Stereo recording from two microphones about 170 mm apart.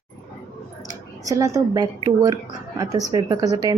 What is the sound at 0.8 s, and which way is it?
A woman's voice, 20° right (ahead or behind).